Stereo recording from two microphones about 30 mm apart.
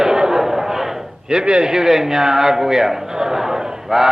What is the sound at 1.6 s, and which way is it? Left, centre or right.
A man's voice, centre.